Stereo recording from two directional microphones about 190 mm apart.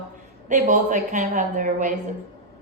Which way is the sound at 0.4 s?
40° right (ahead or behind).